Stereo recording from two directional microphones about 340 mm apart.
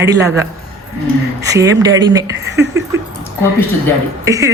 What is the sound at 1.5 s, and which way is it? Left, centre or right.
Speech, centre.